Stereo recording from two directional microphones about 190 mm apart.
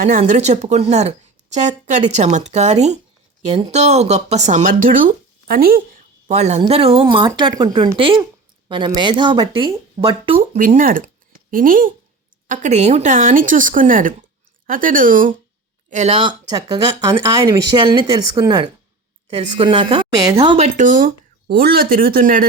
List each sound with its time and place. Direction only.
0.0 s a woman's voice: 40° right (ahead or behind)
10.6 s a woman's voice: 45° right (ahead or behind)
17.4 s speech: 20° right (ahead or behind)
20.7 s speech: 45° right (ahead or behind)